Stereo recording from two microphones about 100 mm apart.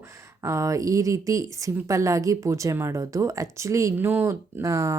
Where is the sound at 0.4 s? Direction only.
30° right (ahead or behind).